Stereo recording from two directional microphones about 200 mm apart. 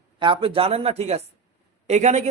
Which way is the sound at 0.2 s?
25° right (ahead or behind).